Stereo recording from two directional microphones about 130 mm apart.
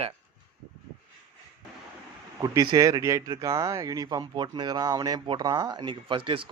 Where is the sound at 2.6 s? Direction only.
30° right (ahead or behind).